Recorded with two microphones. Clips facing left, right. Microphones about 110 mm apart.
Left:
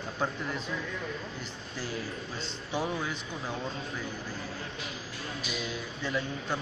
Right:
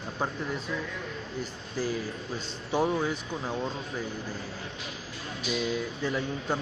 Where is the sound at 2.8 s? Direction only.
20° right (ahead or behind).